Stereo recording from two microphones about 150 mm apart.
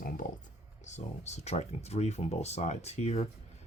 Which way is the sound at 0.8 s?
50° left (ahead or behind).